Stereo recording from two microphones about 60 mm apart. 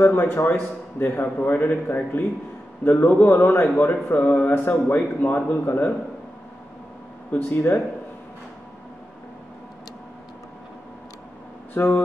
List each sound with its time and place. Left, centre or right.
0.0 s speech: left
7.3 s speech: left
11.7 s speech: left